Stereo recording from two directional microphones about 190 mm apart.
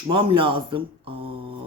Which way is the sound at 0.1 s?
25° right (ahead or behind).